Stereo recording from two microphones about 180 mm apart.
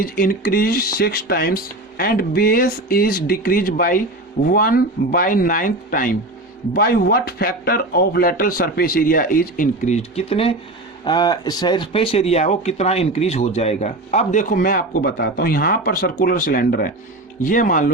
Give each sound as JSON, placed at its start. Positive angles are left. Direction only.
{"t": 0.0, "sound": "a man's voice", "side_deg": 50}